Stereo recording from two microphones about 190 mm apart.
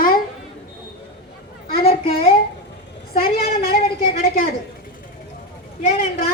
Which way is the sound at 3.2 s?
50° left (ahead or behind).